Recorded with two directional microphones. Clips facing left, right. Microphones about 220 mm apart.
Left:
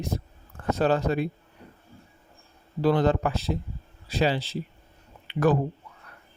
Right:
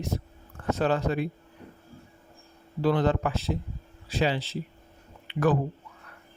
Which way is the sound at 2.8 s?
35° left (ahead or behind).